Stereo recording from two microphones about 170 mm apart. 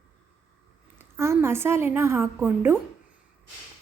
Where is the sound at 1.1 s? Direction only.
15° right (ahead or behind).